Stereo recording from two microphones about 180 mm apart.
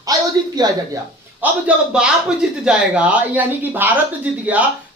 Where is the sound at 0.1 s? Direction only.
20° right (ahead or behind).